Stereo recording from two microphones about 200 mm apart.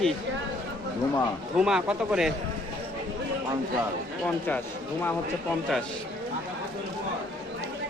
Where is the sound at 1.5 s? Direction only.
5° right (ahead or behind).